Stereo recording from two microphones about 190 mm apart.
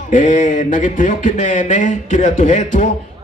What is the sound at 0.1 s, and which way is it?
Speech, 40° left (ahead or behind).